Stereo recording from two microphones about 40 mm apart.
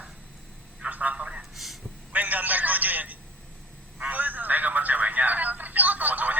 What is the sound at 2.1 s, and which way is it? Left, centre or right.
Telephone, right.